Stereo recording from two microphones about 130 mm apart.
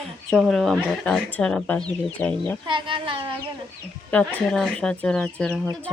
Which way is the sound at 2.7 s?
40° right (ahead or behind).